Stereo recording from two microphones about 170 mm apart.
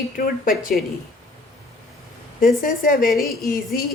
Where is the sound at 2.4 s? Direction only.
55° left (ahead or behind).